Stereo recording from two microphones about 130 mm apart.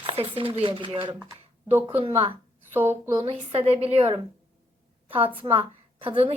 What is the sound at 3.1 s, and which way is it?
Speech, 35° right (ahead or behind).